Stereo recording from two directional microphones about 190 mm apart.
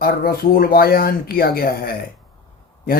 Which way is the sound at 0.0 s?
50° left (ahead or behind).